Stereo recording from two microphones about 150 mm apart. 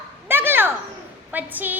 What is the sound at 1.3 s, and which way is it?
Speech, 10° right (ahead or behind).